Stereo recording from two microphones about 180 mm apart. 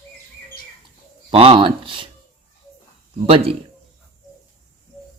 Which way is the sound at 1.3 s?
30° right (ahead or behind).